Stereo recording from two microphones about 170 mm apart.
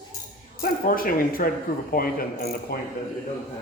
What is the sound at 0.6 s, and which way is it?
Speech, 55° left (ahead or behind).